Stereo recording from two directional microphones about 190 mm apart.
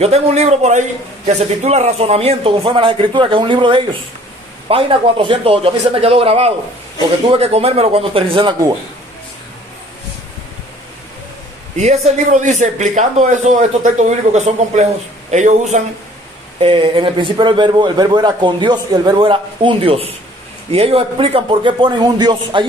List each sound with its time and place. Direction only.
0.0 s a man's voice: 35° right (ahead or behind)
11.8 s speech: 40° right (ahead or behind)
16.6 s a man's voice: 30° right (ahead or behind)